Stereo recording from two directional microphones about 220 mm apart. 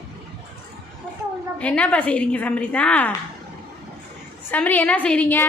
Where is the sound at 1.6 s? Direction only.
5° left (ahead or behind).